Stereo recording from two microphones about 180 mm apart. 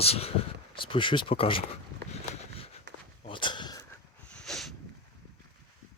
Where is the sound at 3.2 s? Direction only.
25° left (ahead or behind).